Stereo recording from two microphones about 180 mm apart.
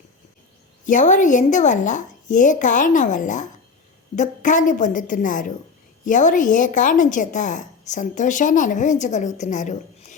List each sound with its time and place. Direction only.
0.9 s a woman's voice: 45° left (ahead or behind)